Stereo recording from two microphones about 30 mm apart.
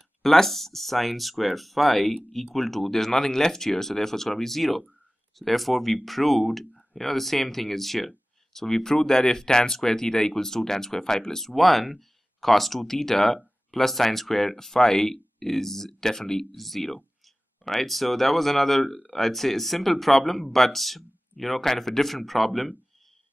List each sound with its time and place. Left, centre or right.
0.2 s speech: centre
11.5 s speech: centre
16.5 s speech: centre